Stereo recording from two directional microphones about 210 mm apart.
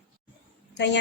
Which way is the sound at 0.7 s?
55° left (ahead or behind).